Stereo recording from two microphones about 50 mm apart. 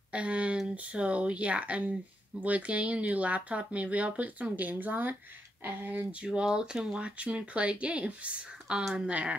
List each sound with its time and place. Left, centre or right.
0.1 s speech: right
6.2 s speech: centre